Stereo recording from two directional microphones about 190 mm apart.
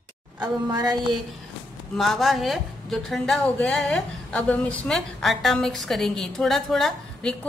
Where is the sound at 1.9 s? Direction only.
Centre (ahead or behind).